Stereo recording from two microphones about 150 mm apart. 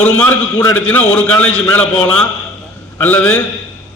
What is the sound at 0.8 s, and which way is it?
A man's voice, 10° left (ahead or behind).